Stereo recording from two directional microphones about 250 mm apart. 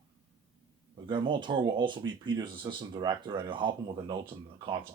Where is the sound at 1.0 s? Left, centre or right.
Centre.